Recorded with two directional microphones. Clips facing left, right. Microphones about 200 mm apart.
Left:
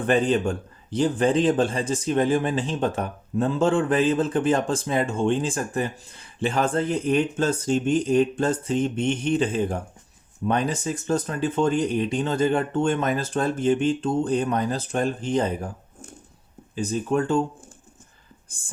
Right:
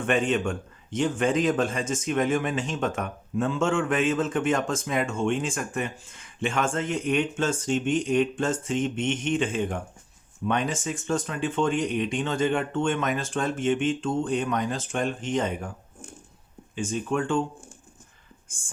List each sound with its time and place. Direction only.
0.0 s a man's voice: 35° left (ahead or behind)
16.7 s a man's voice: 35° left (ahead or behind)